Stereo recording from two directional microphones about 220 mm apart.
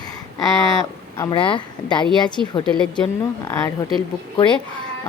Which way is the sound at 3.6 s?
15° left (ahead or behind).